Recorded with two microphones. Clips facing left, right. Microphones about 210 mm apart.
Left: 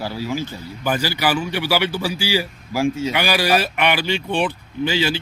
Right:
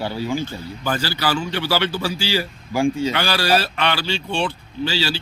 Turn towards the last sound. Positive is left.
turn(degrees=20)  # may be behind; listen again after turning